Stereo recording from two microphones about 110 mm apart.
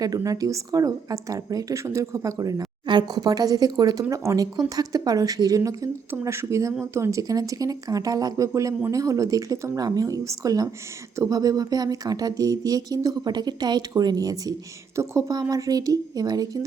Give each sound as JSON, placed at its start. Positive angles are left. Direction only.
{"t": 0.0, "sound": "speech", "side_deg": -30}